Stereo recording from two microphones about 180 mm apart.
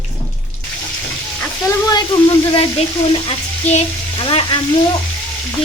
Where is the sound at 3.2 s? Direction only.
35° left (ahead or behind).